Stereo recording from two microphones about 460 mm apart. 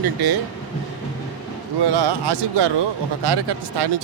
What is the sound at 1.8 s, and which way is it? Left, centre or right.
Speech, right.